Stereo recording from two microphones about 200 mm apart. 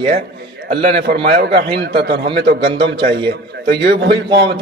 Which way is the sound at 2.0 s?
55° right (ahead or behind).